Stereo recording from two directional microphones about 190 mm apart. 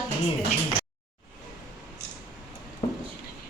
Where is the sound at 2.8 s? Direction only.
30° left (ahead or behind).